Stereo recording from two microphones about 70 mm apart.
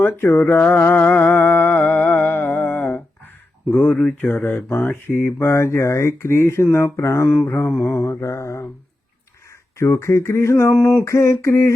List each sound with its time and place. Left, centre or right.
0.5 s music: left
2.6 s humming: left
3.7 s speech: left
4.0 s a sound: centre
4.4 s speech: left
7.8 s speech: left
9.7 s speech: left